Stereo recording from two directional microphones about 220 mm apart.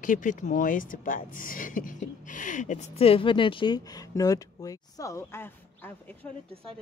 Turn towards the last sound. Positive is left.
turn(degrees=10)  # may be behind; listen again after turning